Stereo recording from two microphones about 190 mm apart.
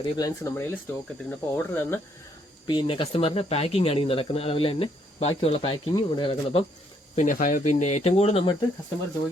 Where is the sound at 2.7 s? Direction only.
25° left (ahead or behind).